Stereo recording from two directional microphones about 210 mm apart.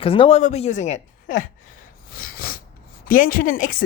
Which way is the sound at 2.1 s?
45° left (ahead or behind).